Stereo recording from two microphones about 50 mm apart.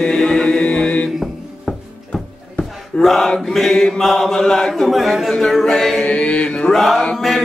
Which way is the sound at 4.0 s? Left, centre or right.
Centre.